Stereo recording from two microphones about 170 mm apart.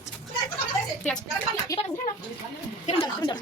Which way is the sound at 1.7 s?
20° left (ahead or behind).